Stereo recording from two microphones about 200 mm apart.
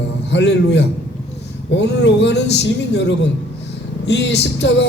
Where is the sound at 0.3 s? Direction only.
60° left (ahead or behind).